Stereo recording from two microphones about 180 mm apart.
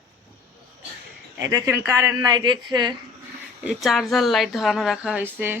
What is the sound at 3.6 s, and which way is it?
Speech, centre (ahead or behind).